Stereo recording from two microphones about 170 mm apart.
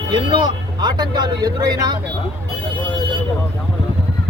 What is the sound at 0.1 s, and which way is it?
Speech, 25° right (ahead or behind).